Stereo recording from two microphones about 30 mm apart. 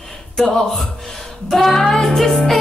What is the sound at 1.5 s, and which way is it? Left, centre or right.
Music, centre.